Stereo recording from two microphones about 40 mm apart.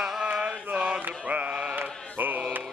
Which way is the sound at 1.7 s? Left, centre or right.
Right.